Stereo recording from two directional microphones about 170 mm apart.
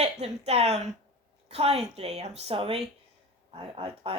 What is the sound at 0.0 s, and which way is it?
Speech, 40° right (ahead or behind).